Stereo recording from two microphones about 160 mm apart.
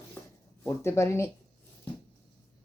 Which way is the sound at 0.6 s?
15° left (ahead or behind).